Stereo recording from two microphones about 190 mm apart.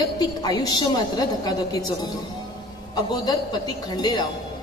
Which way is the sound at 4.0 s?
20° left (ahead or behind).